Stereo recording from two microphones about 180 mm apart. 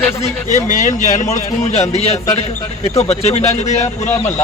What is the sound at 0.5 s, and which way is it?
Speech, 45° left (ahead or behind).